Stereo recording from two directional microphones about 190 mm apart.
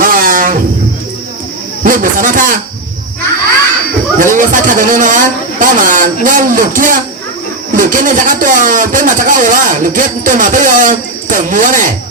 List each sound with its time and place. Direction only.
0.0 s a sound: 45° right (ahead or behind)
1.8 s a man's voice: 45° right (ahead or behind)
4.2 s speech: 45° right (ahead or behind)